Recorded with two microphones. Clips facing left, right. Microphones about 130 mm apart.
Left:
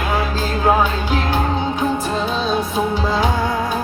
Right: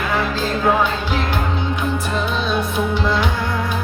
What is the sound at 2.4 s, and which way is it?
Music, 60° right (ahead or behind).